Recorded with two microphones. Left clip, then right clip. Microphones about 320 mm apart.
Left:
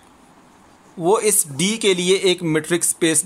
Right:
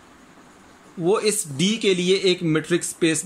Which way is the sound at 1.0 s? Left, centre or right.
Centre.